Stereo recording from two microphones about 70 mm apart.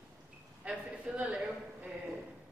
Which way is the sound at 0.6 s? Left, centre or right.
Centre.